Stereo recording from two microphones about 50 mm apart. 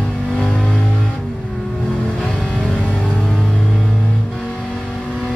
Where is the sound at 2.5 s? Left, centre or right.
Centre.